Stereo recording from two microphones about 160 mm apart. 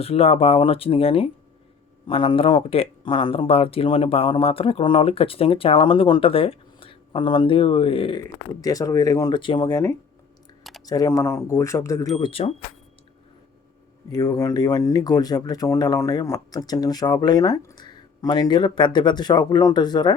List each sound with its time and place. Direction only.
0.0 s speech: 40° left (ahead or behind)
8.2 s speech: 20° left (ahead or behind)
10.6 s a sound: centre (ahead or behind)
10.8 s speech: 20° left (ahead or behind)
12.1 s speech: 35° left (ahead or behind)
14.1 s speech: 20° left (ahead or behind)